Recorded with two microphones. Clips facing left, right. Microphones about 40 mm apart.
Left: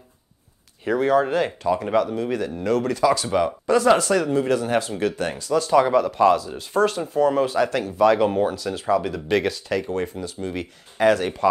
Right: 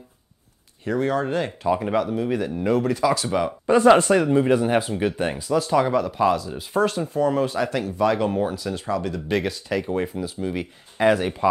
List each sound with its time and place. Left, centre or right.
0.8 s speech: centre
1.6 s speech: centre
3.6 s speech: right
5.5 s speech: centre